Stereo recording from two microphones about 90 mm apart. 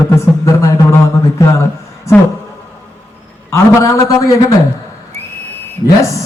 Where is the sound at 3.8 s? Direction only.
35° left (ahead or behind).